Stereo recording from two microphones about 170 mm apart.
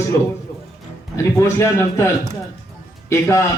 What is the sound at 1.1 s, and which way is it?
Speech, 15° left (ahead or behind).